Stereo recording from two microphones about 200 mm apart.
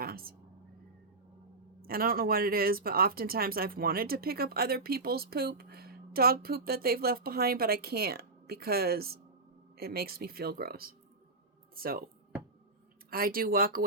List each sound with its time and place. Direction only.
0.0 s a woman's voice: 50° right (ahead or behind)
1.8 s speech: 45° right (ahead or behind)
13.1 s speech: 45° right (ahead or behind)